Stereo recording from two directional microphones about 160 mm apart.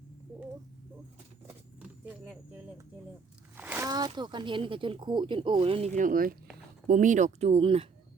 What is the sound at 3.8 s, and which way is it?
Speech, 25° right (ahead or behind).